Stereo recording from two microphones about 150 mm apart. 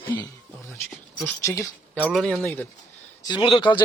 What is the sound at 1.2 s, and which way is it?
Speech, 15° left (ahead or behind).